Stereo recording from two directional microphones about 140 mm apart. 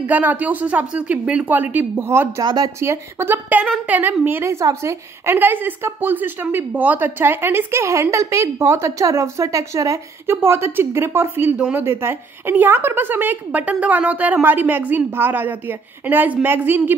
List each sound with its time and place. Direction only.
0.0 s a woman's voice: 10° right (ahead or behind)
2.4 s a woman's voice: 30° right (ahead or behind); by 11.8 s 5° right (ahead or behind)
11.8 s a woman's voice: 15° right (ahead or behind)